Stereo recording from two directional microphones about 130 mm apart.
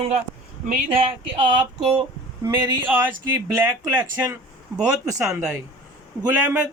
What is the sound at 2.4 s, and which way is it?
Speech, 20° right (ahead or behind).